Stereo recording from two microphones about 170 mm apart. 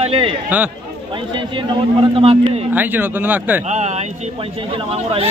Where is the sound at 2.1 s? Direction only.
35° right (ahead or behind).